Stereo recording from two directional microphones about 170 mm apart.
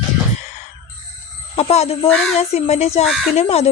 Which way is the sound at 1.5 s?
35° left (ahead or behind).